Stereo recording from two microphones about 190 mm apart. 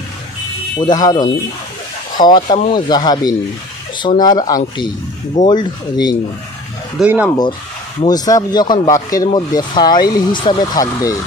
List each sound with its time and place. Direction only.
0.7 s speech: 20° left (ahead or behind)
7.0 s speech: 5° right (ahead or behind)
8.0 s speech: 20° left (ahead or behind)